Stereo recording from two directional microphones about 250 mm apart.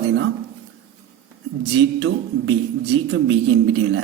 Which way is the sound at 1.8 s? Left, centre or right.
Right.